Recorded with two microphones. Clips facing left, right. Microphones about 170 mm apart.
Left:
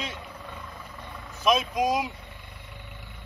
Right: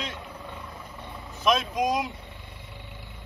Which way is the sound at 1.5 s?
5° left (ahead or behind).